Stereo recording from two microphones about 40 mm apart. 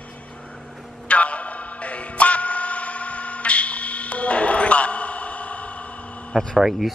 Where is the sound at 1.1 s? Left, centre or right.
Left.